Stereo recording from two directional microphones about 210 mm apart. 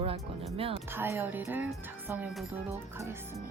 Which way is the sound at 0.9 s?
10° right (ahead or behind).